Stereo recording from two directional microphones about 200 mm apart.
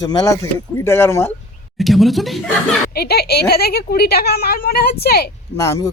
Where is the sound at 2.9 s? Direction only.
50° left (ahead or behind).